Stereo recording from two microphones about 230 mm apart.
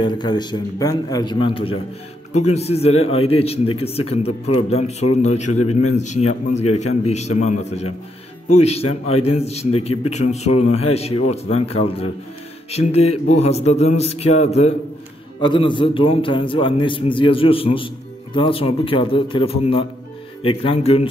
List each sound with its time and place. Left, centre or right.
0.0 s a man's voice: centre
6.6 s a man's voice: left
7.1 s a man's voice: left
9.1 s a man's voice: left